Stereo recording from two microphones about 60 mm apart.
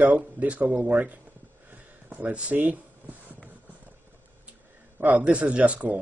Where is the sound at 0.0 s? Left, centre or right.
Right.